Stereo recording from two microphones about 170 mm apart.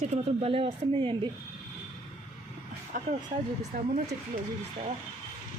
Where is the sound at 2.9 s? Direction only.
50° right (ahead or behind).